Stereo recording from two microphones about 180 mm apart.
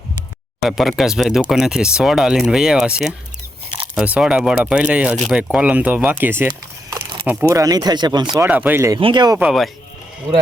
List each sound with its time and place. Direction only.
0.6 s speech: centre (ahead or behind)
6.5 s a sound: 25° right (ahead or behind)
7.3 s speech: 10° right (ahead or behind)
8.4 s speech: 10° right (ahead or behind)
9.0 s speech: 25° right (ahead or behind)
9.4 s speech: centre (ahead or behind)